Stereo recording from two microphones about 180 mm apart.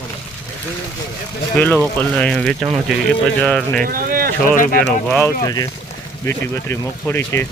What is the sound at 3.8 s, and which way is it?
Speech, 50° right (ahead or behind).